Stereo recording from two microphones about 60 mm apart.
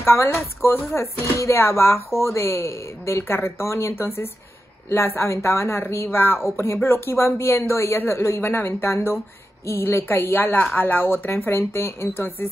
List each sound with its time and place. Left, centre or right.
0.0 s speech: left
0.3 s speech: left